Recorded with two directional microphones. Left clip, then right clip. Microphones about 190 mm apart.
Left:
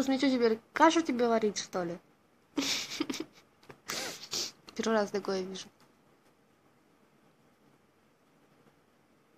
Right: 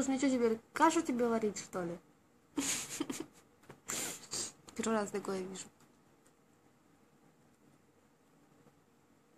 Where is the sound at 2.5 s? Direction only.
10° left (ahead or behind).